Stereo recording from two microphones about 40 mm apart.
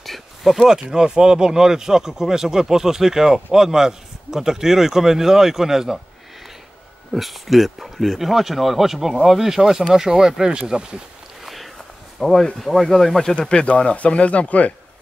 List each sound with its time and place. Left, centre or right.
0.0 s a sound: centre
0.6 s speech: centre
7.1 s speech: centre; by 11.0 s right
11.4 s a sound: centre
12.2 s speech: centre
13.4 s speech: left